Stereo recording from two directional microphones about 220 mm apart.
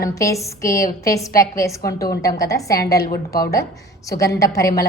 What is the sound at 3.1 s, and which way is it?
A woman's voice, 15° left (ahead or behind).